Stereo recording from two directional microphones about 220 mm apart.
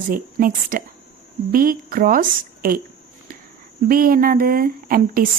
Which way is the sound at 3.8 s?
40° right (ahead or behind).